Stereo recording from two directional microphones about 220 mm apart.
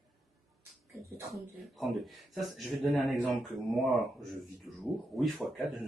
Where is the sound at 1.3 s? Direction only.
Centre (ahead or behind).